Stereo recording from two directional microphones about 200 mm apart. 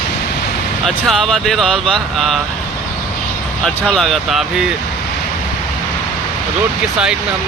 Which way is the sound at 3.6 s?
Centre (ahead or behind).